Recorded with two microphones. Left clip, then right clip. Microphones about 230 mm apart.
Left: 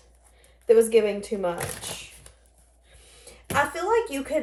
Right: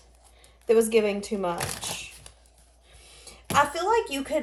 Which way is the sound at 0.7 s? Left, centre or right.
Right.